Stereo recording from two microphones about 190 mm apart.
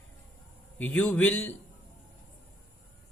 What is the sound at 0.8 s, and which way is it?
Speech, 10° left (ahead or behind).